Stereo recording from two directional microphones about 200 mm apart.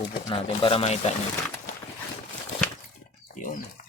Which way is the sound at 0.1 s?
25° left (ahead or behind).